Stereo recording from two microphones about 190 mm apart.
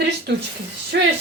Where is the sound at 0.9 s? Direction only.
60° right (ahead or behind).